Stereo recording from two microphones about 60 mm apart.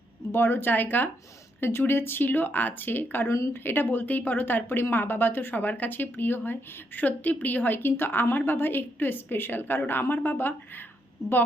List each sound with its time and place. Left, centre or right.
0.3 s speech: left
3.2 s speech: left
3.6 s speech: left